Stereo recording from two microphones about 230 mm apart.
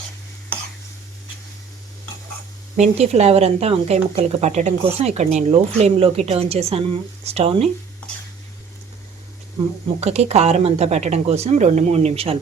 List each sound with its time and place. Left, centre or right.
2.7 s a woman's voice: right
10.0 s a woman's voice: right